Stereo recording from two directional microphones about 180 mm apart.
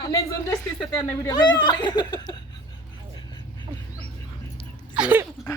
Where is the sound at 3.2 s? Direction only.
25° left (ahead or behind).